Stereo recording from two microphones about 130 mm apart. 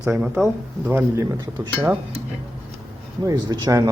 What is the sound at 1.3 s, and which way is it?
Speech, 35° right (ahead or behind).